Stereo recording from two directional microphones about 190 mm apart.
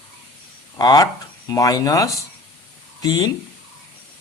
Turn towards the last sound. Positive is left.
turn(degrees=20)  # may be behind; listen again after turning